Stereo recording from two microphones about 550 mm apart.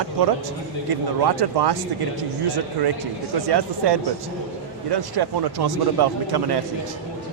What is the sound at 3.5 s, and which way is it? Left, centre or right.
A man's voice, right.